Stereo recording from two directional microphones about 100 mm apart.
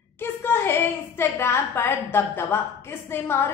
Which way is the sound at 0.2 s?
25° left (ahead or behind).